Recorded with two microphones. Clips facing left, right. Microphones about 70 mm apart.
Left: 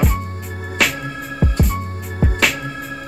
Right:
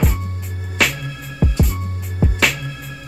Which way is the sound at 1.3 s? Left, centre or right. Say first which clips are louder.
Even; left.